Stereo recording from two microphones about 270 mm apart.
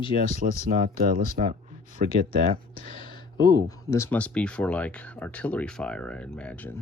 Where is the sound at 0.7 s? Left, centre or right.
Right.